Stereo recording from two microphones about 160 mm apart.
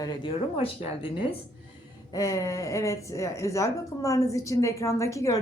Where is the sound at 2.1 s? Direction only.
20° left (ahead or behind).